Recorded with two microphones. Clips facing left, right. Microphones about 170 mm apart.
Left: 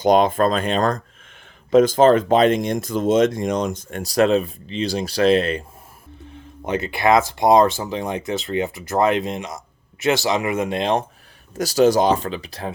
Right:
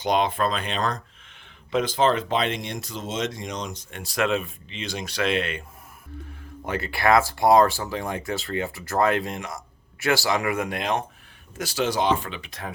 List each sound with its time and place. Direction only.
0.0 s speech: 45° left (ahead or behind)
6.7 s speech: 20° left (ahead or behind)
11.5 s speech: 40° left (ahead or behind)